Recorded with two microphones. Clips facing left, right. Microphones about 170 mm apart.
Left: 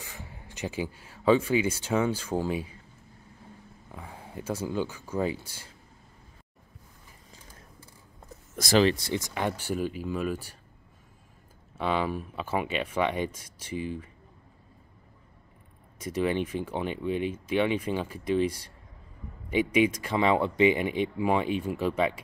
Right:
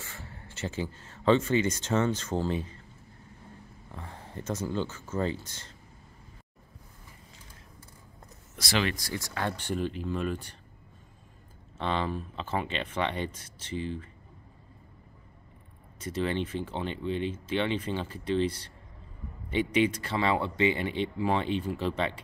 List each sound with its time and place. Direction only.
0.0 s speech: 15° left (ahead or behind)
3.9 s speech: 10° left (ahead or behind)
8.5 s speech: 45° left (ahead or behind)
8.8 s speech: 25° left (ahead or behind); by 10.5 s 5° left (ahead or behind)
11.8 s speech: 10° left (ahead or behind)
16.0 s speech: 10° left (ahead or behind)